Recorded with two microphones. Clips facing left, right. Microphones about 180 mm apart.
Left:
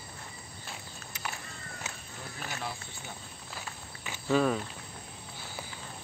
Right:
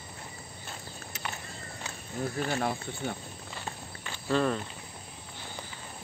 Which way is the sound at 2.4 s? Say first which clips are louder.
Right 8 dB; 50° right (ahead or behind).